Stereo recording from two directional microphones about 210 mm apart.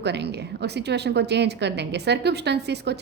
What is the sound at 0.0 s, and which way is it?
A woman's voice, 55° right (ahead or behind).